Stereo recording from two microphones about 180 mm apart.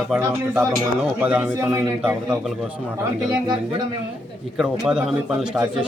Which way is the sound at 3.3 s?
20° right (ahead or behind).